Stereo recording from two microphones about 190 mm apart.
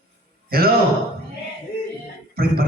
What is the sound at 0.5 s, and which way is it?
Speech, 50° right (ahead or behind).